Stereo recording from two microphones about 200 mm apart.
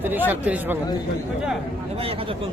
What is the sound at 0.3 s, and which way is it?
Speech, 10° right (ahead or behind).